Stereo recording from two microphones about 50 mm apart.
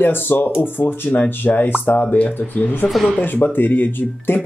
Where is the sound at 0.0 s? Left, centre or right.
Left.